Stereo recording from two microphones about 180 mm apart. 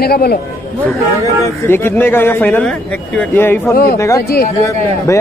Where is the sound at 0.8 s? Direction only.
15° left (ahead or behind).